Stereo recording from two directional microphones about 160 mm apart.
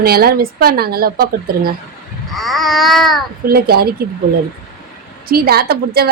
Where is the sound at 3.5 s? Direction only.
75° right (ahead or behind).